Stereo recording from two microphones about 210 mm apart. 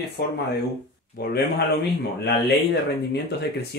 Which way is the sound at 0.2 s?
50° left (ahead or behind).